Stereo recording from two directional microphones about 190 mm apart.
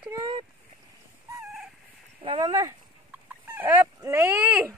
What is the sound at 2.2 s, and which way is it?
Speech, 25° right (ahead or behind).